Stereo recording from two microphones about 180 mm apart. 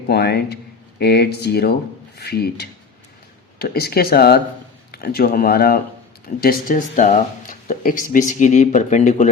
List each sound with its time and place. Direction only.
0.1 s speech: 65° left (ahead or behind); by 9.3 s 40° left (ahead or behind)